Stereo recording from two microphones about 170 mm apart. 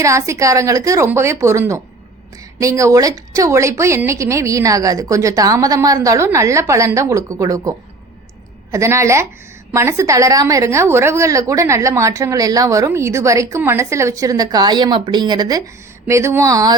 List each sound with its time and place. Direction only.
0.0 s a woman's voice: 20° right (ahead or behind)